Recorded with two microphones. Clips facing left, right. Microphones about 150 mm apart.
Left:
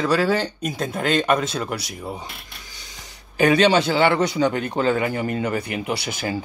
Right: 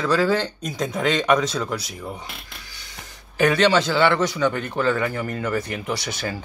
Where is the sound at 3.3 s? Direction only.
15° left (ahead or behind).